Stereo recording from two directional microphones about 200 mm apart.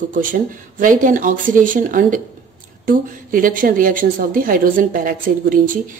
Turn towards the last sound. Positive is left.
turn(degrees=-45)  # may be behind; listen again after turning